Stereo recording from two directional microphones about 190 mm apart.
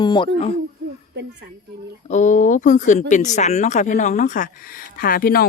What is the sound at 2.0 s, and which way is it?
Speech, 40° left (ahead or behind).